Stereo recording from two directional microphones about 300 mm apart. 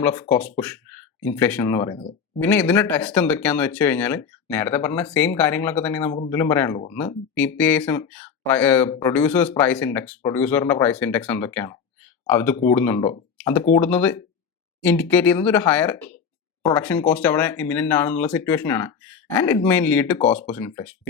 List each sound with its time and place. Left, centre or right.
0.0 s speech: centre
2.0 s speech: left
2.4 s speech: centre